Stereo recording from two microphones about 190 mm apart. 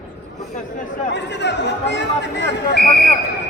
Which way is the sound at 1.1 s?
65° left (ahead or behind).